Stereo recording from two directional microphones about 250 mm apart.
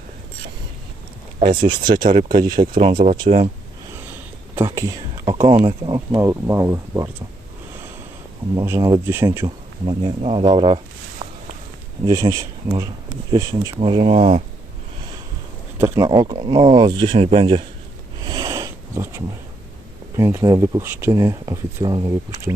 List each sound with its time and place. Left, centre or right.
1.4 s speech: right
2.0 s speech: right
2.9 s speech: right
4.5 s speech: centre
8.5 s speech: centre
12.0 s speech: centre
15.8 s speech: centre
18.2 s a sound: centre
20.1 s speech: centre